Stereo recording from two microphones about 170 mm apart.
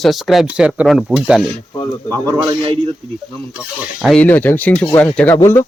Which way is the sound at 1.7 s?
15° left (ahead or behind).